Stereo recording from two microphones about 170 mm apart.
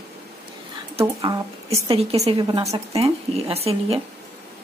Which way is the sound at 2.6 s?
40° right (ahead or behind).